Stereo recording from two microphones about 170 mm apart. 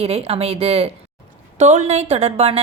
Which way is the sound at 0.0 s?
35° right (ahead or behind).